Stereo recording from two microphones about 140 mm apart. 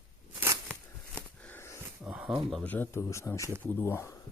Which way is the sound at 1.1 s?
15° left (ahead or behind).